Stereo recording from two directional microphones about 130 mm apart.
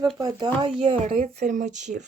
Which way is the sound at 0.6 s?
40° right (ahead or behind).